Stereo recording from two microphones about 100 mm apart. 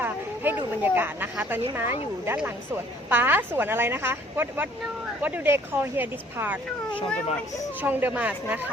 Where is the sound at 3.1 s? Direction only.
20° right (ahead or behind).